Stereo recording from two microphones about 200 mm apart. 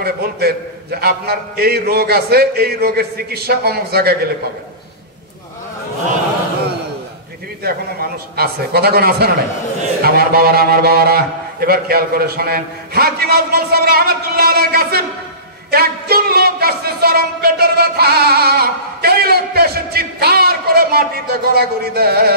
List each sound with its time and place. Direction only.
0.0 s speech: 50° right (ahead or behind)
7.6 s speech: 50° right (ahead or behind)